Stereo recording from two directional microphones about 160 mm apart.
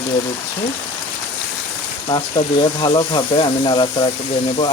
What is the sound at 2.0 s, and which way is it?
Speech, 30° left (ahead or behind).